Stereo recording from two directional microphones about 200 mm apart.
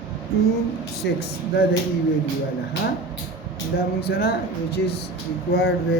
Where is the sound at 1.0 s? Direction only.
60° left (ahead or behind).